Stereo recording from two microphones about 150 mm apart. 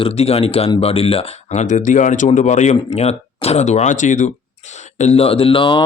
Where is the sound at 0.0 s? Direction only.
40° left (ahead or behind).